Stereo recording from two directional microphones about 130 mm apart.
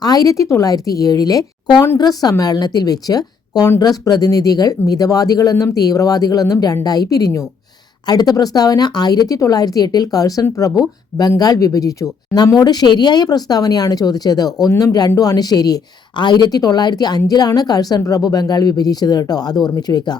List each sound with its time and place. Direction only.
0.0 s a woman's voice: 30° left (ahead or behind)